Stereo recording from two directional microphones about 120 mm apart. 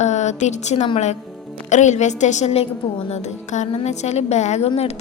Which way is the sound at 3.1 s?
75° left (ahead or behind).